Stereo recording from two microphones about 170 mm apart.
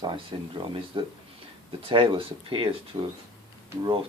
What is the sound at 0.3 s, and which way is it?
Speech, 30° right (ahead or behind).